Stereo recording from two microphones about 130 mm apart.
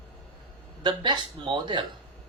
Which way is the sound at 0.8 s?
35° right (ahead or behind).